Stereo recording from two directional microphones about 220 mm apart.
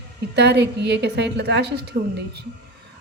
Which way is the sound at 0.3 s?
50° right (ahead or behind).